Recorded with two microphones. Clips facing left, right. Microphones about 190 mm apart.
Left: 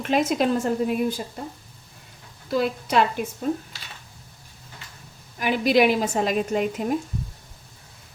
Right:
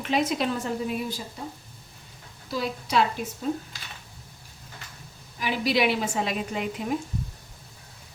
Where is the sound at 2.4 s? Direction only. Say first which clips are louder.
Left 6 dB; 55° left (ahead or behind).